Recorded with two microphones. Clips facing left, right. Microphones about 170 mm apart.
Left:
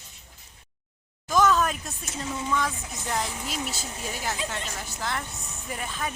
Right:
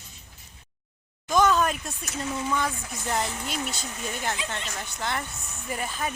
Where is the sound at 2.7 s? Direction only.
20° left (ahead or behind).